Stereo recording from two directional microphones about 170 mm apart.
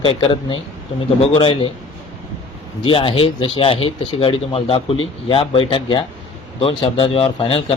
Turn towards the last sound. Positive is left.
turn(degrees=35)  # may be behind; listen again after turning